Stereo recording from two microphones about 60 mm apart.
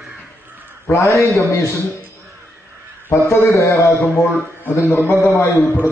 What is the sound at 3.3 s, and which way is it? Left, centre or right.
Speech, left.